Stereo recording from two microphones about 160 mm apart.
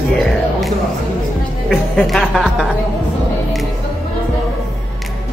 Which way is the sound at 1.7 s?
Centre (ahead or behind).